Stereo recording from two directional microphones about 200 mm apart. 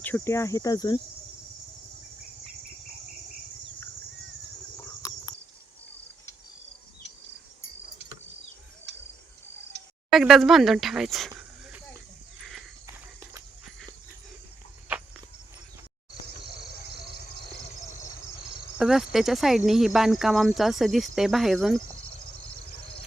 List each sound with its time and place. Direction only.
0.0 s cricket: 10° left (ahead or behind)
5.0 s cricket: 15° left (ahead or behind)
8.9 s cricket: 55° right (ahead or behind)
10.1 s speech: centre (ahead or behind)
12.4 s a sound: centre (ahead or behind)
18.8 s speech: centre (ahead or behind)